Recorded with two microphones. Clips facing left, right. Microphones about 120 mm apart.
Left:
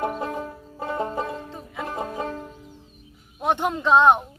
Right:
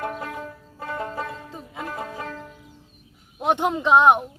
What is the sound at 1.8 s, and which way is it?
Music, 25° left (ahead or behind).